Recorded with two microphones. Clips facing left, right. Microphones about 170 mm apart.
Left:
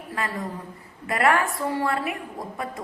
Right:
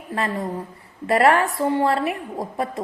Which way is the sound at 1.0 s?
35° right (ahead or behind).